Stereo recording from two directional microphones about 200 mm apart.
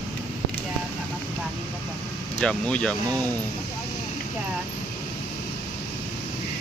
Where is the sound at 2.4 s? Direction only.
5° left (ahead or behind).